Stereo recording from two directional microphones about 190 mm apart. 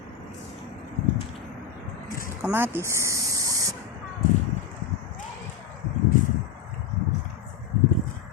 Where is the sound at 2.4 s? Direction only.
10° right (ahead or behind).